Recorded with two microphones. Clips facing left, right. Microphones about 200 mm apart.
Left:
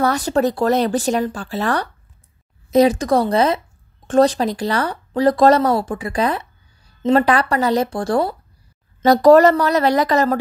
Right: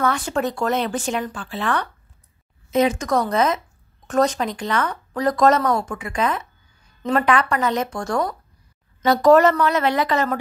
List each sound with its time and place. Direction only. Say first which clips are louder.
0.0 s speech: left 5 dB; 35° left (ahead or behind)